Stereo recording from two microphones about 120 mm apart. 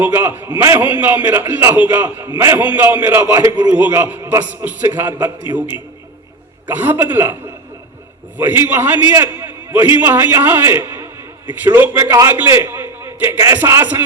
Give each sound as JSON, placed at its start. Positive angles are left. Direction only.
{"t": 0.0, "sound": "a man's voice", "side_deg": -20}
{"t": 3.8, "sound": "a man's voice", "side_deg": -15}
{"t": 6.7, "sound": "a man's voice", "side_deg": -15}
{"t": 8.4, "sound": "a man's voice", "side_deg": -20}